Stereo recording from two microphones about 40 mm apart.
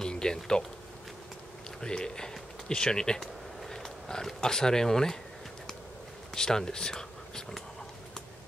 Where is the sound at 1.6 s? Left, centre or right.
Centre.